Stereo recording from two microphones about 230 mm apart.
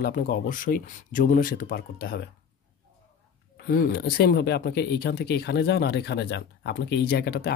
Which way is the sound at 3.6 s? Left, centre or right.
Left.